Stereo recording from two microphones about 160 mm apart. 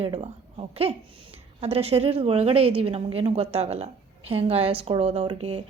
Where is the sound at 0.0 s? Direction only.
35° right (ahead or behind).